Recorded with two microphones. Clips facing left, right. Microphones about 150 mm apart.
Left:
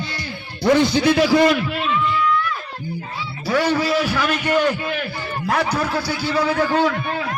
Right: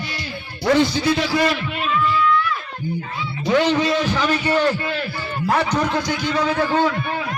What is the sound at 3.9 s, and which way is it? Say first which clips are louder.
A man's voice: even; 10° left (ahead or behind).